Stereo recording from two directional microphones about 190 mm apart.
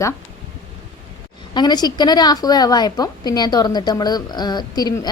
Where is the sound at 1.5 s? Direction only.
20° left (ahead or behind).